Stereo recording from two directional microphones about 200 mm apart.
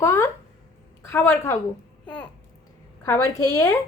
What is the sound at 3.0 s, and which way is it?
Speech, 15° left (ahead or behind).